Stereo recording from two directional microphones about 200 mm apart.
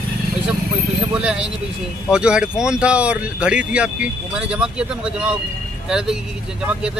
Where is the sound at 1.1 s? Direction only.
5° right (ahead or behind).